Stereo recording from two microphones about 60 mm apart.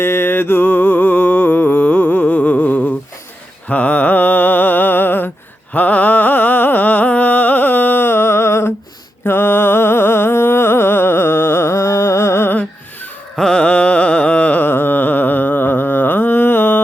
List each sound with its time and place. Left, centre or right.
0.0 s music: left
3.7 s a sound: left
5.7 s music: left
13.3 s carnatic music: centre
14.7 s carnatic music: left